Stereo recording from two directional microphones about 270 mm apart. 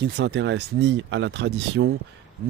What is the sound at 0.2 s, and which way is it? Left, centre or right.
Speech, right.